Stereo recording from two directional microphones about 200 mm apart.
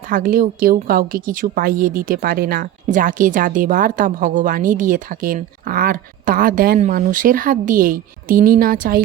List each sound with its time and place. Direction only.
0.1 s a woman's voice: 40° right (ahead or behind)